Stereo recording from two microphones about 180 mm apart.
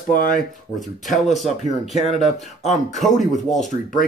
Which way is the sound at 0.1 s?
50° left (ahead or behind).